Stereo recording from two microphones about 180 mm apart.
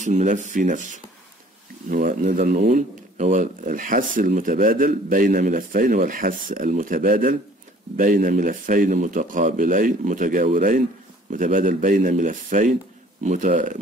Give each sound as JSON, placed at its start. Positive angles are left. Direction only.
{"t": 0.0, "sound": "speech", "side_deg": -40}
{"t": 1.9, "sound": "speech", "side_deg": -50}